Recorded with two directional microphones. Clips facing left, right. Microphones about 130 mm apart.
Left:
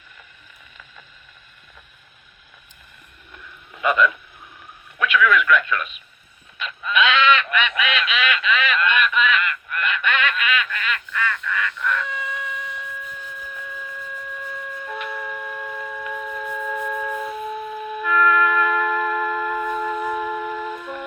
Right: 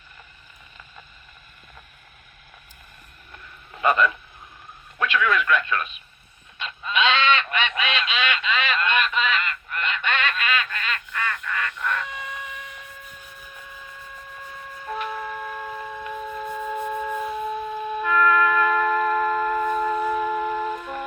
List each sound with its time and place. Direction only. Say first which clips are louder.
3.8 s a sound: even; 35° right (ahead or behind)
4.9 s radio: left 4 dB; 30° right (ahead or behind)
6.6 s goose: left 3 dB; 30° right (ahead or behind)
14.8 s music: right 3 dB; 35° right (ahead or behind)